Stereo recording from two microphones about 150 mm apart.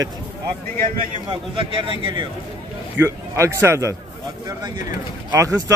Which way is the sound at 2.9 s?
15° right (ahead or behind).